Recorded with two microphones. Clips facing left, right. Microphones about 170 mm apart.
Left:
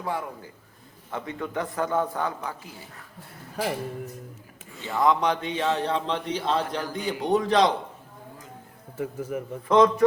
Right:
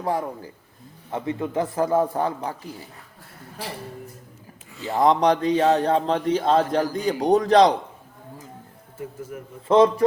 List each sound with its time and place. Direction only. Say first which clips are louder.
0.0 s a man's voice: right 5 dB; 40° right (ahead or behind)
1.1 s a man's voice: right 5 dB; 25° right (ahead or behind)
4.8 s a man's voice: right 4 dB; 35° right (ahead or behind)
9.3 s a man's voice: left 5 dB; 90° left
9.6 s a man's voice: right 3 dB; 30° right (ahead or behind)